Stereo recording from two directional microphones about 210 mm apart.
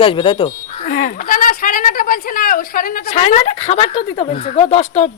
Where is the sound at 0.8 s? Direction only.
40° left (ahead or behind).